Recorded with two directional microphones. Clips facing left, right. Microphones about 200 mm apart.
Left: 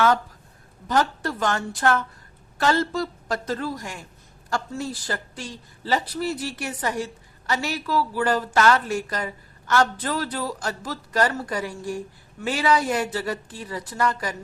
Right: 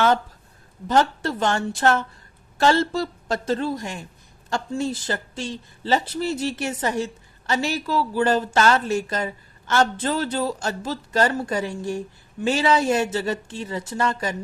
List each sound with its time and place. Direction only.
0.9 s a woman's voice: 25° right (ahead or behind)